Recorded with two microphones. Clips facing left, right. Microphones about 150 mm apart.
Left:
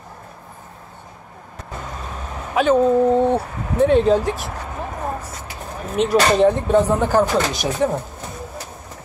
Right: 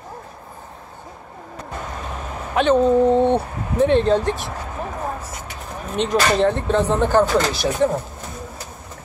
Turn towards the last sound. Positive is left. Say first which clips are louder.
# right 1 dB
turn(degrees=15)  # may be behind; listen again after turning